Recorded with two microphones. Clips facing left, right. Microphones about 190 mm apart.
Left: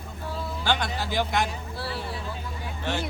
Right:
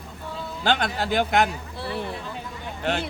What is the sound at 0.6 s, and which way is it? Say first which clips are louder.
Speech: right 5 dB; 60° right (ahead or behind).